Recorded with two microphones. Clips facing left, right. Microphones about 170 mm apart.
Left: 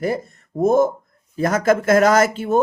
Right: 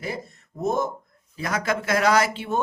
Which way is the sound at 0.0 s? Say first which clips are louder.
Left 9 dB; 50° left (ahead or behind).